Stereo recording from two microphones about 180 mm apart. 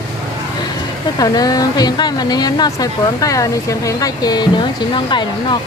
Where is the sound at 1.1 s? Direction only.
20° left (ahead or behind).